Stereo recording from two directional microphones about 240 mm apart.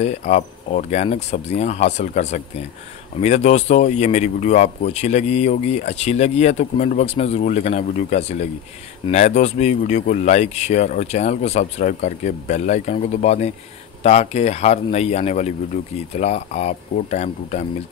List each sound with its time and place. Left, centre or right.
0.0 s speech: left